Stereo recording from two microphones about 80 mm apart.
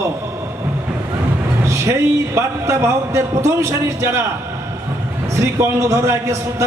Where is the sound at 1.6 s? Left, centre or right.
Right.